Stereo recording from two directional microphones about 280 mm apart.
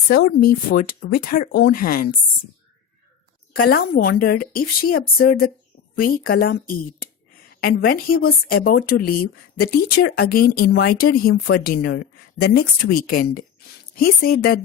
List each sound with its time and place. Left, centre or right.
0.1 s speech: left
3.6 s speech: left